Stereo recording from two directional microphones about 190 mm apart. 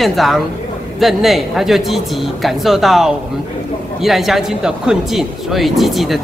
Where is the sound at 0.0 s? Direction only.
Centre (ahead or behind).